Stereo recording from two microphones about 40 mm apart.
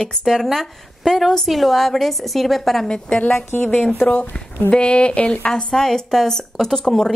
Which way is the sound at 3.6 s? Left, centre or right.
Left.